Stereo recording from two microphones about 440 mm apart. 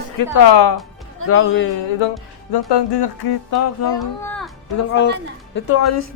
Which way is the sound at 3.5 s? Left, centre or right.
Left.